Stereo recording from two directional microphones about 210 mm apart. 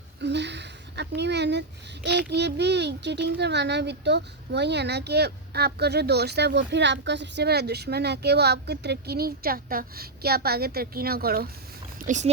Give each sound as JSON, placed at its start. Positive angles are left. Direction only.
{"t": 0.2, "sound": "a sound", "side_deg": -55}
{"t": 2.0, "sound": "speech", "side_deg": -55}
{"t": 11.9, "sound": "speech", "side_deg": -35}